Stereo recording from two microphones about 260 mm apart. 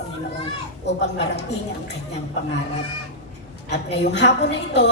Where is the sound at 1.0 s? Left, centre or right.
Left.